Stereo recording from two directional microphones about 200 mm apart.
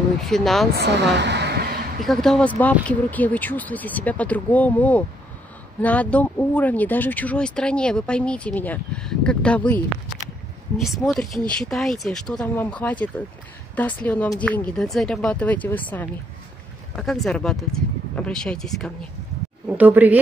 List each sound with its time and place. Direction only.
0.2 s speech: centre (ahead or behind)
0.7 s a sound: 55° right (ahead or behind)
2.0 s speech: 5° left (ahead or behind)
10.8 s speech: centre (ahead or behind)
19.8 s speech: 10° right (ahead or behind)